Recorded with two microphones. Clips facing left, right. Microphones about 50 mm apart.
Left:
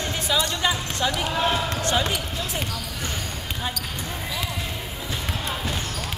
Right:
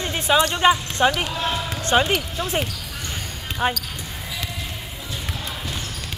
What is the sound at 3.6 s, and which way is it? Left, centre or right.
Speech, right.